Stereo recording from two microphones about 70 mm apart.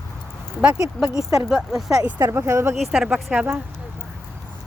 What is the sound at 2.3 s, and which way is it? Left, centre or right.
Speech, right.